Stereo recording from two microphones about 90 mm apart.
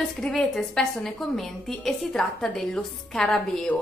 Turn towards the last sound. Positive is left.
turn(degrees=5)  # may be behind; listen again after turning